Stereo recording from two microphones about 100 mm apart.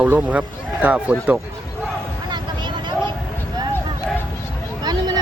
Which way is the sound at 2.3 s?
50° right (ahead or behind).